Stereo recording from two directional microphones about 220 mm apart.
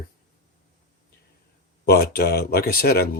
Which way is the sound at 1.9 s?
45° left (ahead or behind).